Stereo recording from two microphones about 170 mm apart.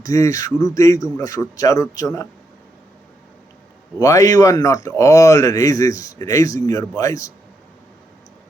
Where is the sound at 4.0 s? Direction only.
20° left (ahead or behind).